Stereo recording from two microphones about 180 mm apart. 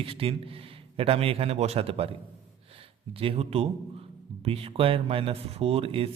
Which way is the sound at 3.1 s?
30° right (ahead or behind).